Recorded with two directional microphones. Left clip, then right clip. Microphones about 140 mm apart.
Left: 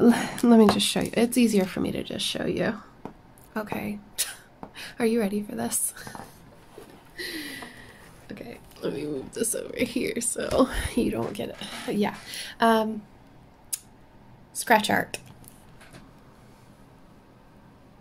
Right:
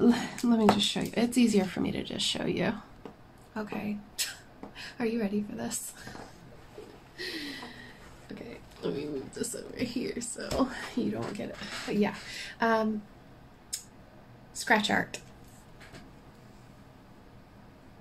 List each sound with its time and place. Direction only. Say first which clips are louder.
0.0 s speech: left 6 dB; 45° left (ahead or behind); by 2.8 s 15° left (ahead or behind)
3.5 s speech: left 5 dB; 50° left (ahead or behind)
7.2 s a sound: left 3 dB; 55° left (ahead or behind)
8.3 s speech: left 4 dB; 50° left (ahead or behind)
14.5 s speech: left 5 dB; 55° left (ahead or behind)